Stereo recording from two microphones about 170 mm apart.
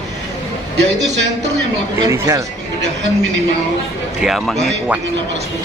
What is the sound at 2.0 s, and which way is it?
Speech, 20° right (ahead or behind).